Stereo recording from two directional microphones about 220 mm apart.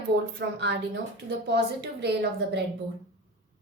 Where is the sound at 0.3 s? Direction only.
50° right (ahead or behind).